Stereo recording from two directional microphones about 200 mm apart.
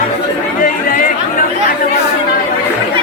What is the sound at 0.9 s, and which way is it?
Speech, 45° left (ahead or behind).